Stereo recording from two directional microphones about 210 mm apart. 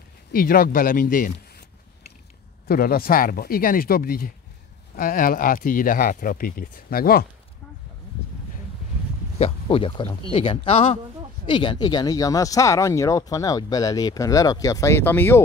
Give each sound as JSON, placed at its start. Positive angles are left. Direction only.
{"t": 0.3, "sound": "speech", "side_deg": 45}
{"t": 2.7, "sound": "speech", "side_deg": 45}
{"t": 9.4, "sound": "speech", "side_deg": 25}